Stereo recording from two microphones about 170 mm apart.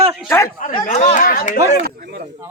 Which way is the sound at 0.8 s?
40° left (ahead or behind).